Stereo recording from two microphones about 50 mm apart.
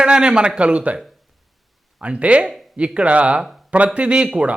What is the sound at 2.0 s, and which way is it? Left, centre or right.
A man's voice, right.